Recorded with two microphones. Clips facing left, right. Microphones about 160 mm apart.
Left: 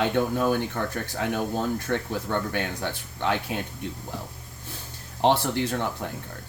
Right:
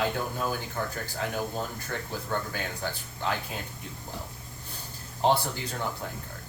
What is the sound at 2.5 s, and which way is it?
Speech, 70° left (ahead or behind).